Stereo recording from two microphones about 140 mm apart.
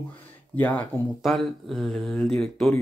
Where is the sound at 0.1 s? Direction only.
10° left (ahead or behind).